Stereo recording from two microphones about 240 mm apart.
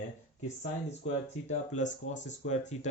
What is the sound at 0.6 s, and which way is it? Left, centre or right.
Speech, left.